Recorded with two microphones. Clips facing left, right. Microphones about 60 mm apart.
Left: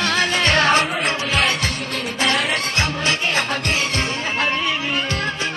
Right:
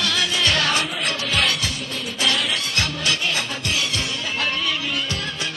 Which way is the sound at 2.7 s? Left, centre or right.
Left.